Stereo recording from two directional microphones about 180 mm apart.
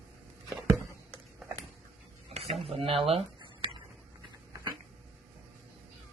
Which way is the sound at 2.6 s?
30° right (ahead or behind).